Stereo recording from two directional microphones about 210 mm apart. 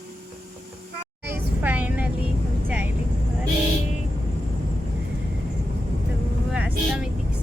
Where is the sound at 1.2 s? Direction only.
10° right (ahead or behind).